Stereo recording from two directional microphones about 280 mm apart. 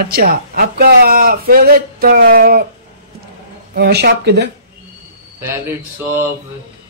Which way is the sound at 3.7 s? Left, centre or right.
Right.